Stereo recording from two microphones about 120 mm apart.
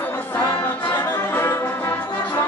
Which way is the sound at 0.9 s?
25° left (ahead or behind).